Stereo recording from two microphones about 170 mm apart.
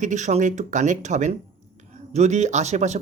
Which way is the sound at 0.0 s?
45° right (ahead or behind).